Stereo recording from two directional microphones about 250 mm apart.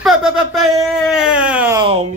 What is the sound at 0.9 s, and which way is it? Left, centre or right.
Speech, centre.